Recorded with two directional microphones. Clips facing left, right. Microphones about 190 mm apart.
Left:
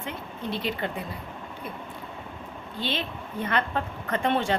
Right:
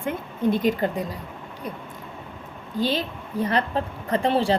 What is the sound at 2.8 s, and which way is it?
A woman's voice, 40° right (ahead or behind).